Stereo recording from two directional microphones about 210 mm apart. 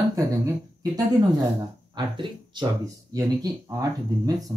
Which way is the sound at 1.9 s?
20° right (ahead or behind).